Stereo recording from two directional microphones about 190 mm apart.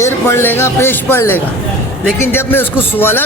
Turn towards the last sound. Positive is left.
turn(degrees=10)  # may be behind; listen again after turning